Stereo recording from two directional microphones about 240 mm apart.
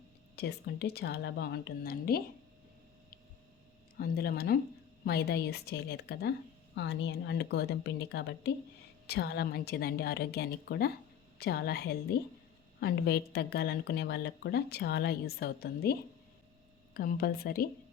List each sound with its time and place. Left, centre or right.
0.3 s speech: left
3.9 s a woman's voice: left